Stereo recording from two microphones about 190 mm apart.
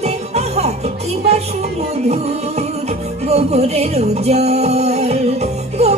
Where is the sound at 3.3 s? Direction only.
35° right (ahead or behind).